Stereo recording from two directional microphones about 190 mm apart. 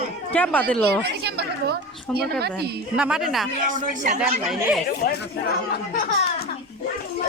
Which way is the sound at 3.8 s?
40° right (ahead or behind).